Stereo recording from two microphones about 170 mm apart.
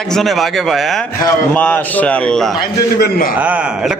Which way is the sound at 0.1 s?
Centre (ahead or behind).